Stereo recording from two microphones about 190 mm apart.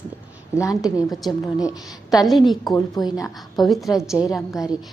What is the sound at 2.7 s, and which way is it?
Speech, 20° left (ahead or behind).